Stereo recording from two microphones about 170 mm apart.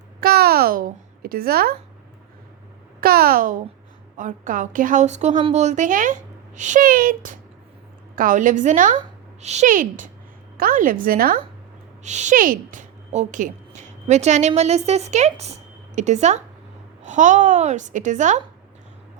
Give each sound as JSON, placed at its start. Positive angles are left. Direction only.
{"t": 0.2, "sound": "a woman's voice", "side_deg": -65}
{"t": 3.0, "sound": "a woman's voice", "side_deg": -60}
{"t": 12.0, "sound": "a woman's voice", "side_deg": -45}